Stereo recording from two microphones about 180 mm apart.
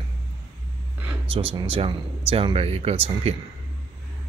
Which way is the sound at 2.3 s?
30° right (ahead or behind).